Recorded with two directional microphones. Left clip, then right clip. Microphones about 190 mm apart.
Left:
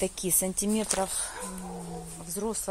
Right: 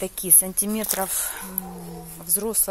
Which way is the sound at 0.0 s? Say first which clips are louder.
Right 2 dB; 15° left (ahead or behind).